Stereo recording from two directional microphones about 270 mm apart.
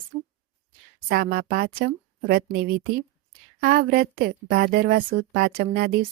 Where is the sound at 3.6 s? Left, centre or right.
Right.